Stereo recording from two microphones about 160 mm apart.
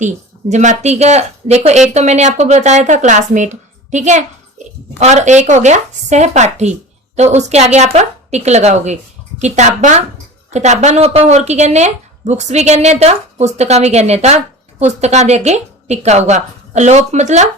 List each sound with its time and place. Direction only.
0.0 s speech: 50° right (ahead or behind)